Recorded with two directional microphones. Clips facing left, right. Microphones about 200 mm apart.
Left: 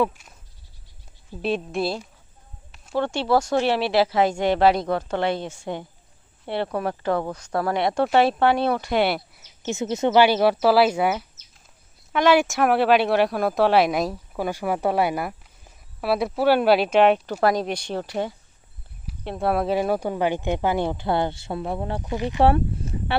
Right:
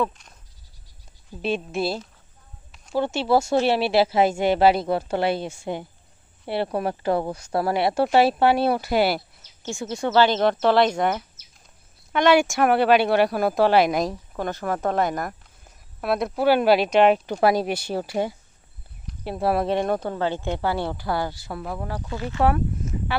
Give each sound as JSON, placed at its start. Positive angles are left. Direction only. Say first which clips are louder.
{"t": 0.0, "sound": "speech", "louder": "left 3 dB", "side_deg": 5}
{"t": 1.4, "sound": "speech", "louder": "left 1 dB", "side_deg": 0}
{"t": 9.4, "sound": "speech", "louder": "left 4 dB", "side_deg": 20}
{"t": 22.4, "sound": "speech", "louder": "left 2 dB", "side_deg": 30}